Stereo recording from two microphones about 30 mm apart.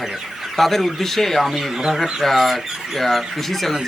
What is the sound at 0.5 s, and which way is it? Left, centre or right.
Speech, centre.